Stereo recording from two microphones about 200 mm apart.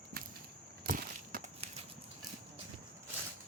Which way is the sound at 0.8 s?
45° right (ahead or behind).